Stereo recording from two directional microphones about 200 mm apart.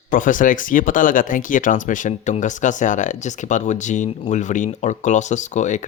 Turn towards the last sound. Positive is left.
turn(degrees=35)  # may be behind; listen again after turning